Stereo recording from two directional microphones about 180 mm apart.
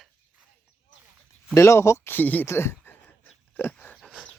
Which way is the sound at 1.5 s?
15° left (ahead or behind).